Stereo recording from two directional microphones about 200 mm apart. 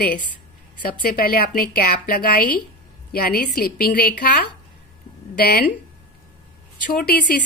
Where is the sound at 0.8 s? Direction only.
50° left (ahead or behind).